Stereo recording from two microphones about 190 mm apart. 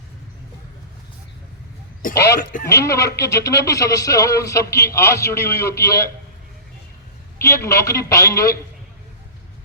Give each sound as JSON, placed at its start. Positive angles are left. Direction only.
{"t": 2.4, "sound": "speech", "side_deg": 45}
{"t": 2.6, "sound": "speech", "side_deg": 15}
{"t": 7.4, "sound": "speech", "side_deg": 15}